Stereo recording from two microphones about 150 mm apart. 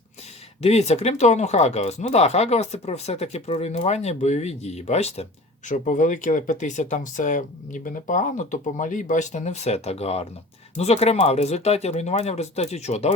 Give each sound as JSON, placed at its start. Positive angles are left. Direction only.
{"t": 0.6, "sound": "speech", "side_deg": 45}